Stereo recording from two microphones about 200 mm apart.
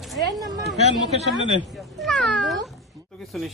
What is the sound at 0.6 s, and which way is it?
Speech, centre (ahead or behind).